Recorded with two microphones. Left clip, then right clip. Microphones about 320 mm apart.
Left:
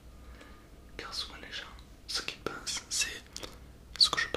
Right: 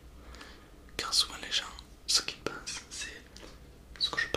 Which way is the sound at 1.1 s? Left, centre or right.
Centre.